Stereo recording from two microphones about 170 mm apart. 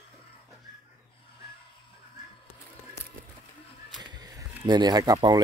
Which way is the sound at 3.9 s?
25° right (ahead or behind).